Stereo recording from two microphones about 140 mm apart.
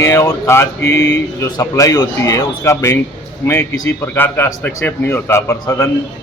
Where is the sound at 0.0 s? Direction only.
20° left (ahead or behind).